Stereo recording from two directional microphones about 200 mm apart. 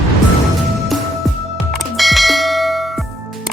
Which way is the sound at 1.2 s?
Centre (ahead or behind).